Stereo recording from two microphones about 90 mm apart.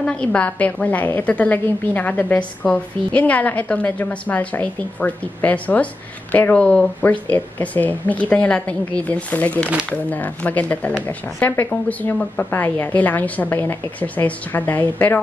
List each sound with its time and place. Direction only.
0.0 s a woman's voice: 10° left (ahead or behind)